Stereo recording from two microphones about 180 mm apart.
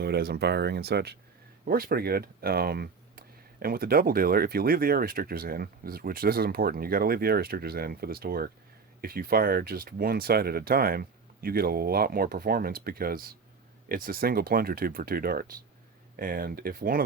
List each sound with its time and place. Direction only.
0.0 s speech: 60° right (ahead or behind)